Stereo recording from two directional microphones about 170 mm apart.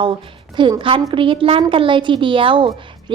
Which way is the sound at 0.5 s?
30° right (ahead or behind).